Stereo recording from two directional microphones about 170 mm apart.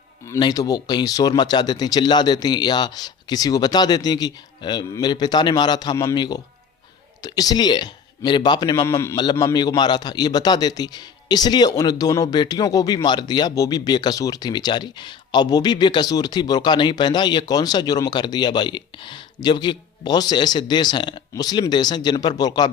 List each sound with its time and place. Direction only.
0.3 s a man's voice: 20° left (ahead or behind)